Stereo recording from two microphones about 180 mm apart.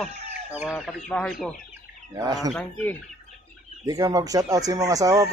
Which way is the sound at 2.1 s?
20° right (ahead or behind).